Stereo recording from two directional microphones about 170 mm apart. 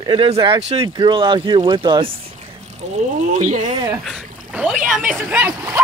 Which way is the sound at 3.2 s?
50° right (ahead or behind).